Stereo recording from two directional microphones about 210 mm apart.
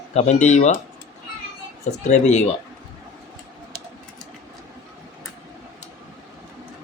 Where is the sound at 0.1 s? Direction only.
35° left (ahead or behind).